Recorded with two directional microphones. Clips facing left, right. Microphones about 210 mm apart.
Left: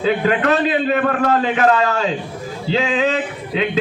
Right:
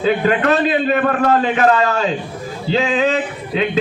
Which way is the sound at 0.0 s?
45° right (ahead or behind).